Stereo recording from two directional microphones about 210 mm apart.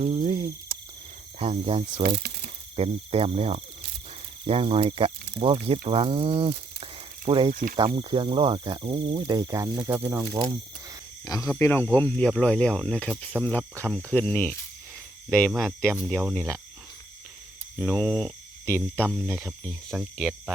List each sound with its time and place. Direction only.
0.0 s cricket: 30° right (ahead or behind)
1.4 s speech: 25° right (ahead or behind)
2.0 s a sound: 50° right (ahead or behind)
2.7 s speech: 30° right (ahead or behind)
11.3 s speech: 15° left (ahead or behind)
17.7 s speech: centre (ahead or behind)
19.0 s speech: 5° right (ahead or behind)